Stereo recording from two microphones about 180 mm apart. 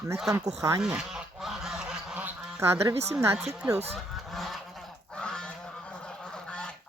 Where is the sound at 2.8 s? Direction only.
35° right (ahead or behind).